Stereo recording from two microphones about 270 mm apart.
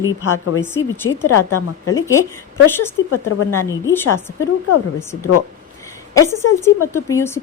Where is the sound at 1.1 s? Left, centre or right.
Left.